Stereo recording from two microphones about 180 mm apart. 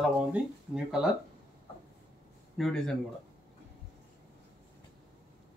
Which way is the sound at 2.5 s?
Centre (ahead or behind).